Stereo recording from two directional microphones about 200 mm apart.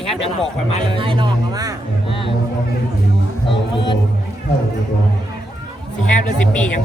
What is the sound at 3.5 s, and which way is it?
Speech, 25° left (ahead or behind).